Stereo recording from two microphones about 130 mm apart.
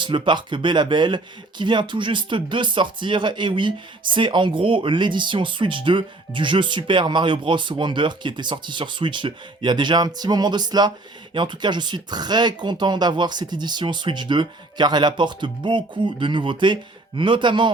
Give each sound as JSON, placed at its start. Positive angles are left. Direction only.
{"t": 0.0, "sound": "speech", "side_deg": -40}